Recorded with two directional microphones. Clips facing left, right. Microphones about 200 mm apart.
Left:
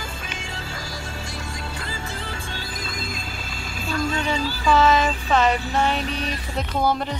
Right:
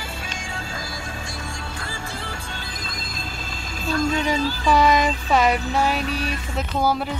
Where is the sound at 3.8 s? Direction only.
40° right (ahead or behind).